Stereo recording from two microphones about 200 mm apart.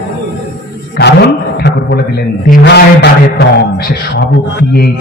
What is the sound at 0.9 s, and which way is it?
Music, 55° left (ahead or behind).